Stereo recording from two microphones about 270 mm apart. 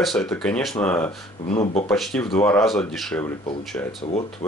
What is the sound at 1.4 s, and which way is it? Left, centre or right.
Speech, left.